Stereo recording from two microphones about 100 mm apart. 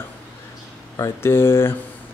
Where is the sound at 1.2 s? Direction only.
25° left (ahead or behind).